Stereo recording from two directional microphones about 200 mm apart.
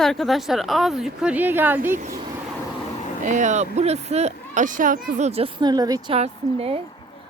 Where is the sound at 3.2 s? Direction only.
35° right (ahead or behind).